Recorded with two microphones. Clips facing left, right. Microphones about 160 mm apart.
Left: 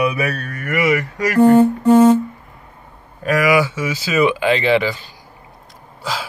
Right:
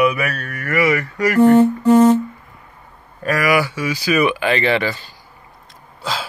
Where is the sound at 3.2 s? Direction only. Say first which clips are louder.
Left 2 dB; 15° left (ahead or behind).